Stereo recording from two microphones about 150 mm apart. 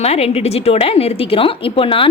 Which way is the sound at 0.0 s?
45° left (ahead or behind).